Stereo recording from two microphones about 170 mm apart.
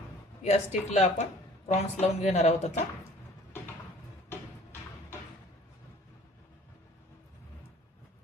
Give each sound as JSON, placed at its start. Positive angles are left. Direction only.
{"t": 0.4, "sound": "speech", "side_deg": 40}